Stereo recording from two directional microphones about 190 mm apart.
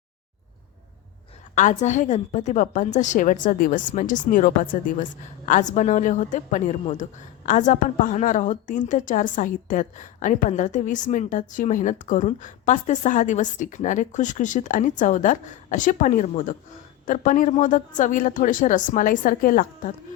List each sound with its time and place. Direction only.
1.5 s a woman's voice: 40° left (ahead or behind)